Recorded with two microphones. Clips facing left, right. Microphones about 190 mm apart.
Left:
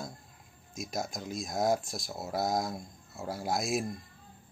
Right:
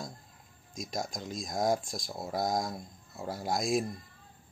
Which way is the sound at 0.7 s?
5° left (ahead or behind).